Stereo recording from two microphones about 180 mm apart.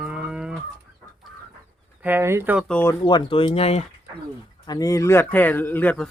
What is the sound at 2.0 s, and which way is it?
Speech, 15° right (ahead or behind).